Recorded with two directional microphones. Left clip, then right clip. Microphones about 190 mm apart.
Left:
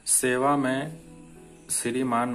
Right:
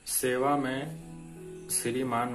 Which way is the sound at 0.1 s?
20° left (ahead or behind).